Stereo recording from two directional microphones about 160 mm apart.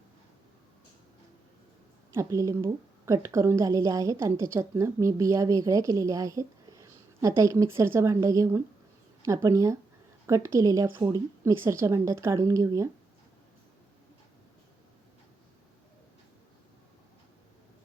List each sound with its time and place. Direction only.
2.1 s a woman's voice: 20° right (ahead or behind)